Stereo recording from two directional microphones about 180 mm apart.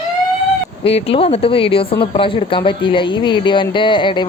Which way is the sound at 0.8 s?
30° left (ahead or behind).